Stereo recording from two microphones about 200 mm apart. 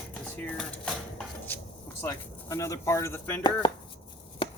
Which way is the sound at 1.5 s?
10° left (ahead or behind).